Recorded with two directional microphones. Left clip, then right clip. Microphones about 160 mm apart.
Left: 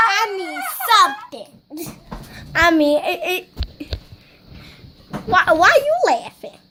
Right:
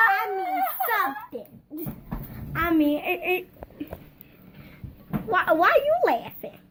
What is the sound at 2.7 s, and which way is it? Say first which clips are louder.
Speech: left 7 dB; 35° left (ahead or behind).